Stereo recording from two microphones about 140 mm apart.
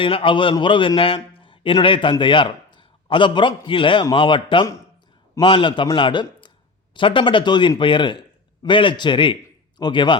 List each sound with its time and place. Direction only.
0.0 s a man's voice: 40° left (ahead or behind)